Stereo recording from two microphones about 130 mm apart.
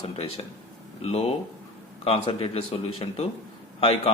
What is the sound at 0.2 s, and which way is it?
Speech, 50° left (ahead or behind).